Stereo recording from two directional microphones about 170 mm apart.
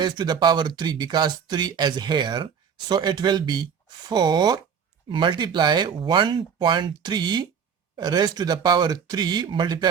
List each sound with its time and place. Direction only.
0.0 s speech: 25° right (ahead or behind)